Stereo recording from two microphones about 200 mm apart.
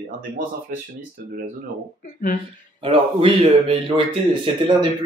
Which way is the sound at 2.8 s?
25° right (ahead or behind).